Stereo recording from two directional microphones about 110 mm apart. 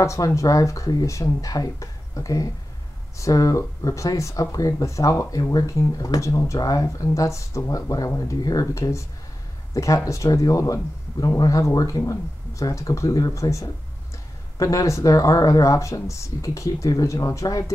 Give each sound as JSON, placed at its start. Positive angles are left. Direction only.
{"t": 0.0, "sound": "speech", "side_deg": 25}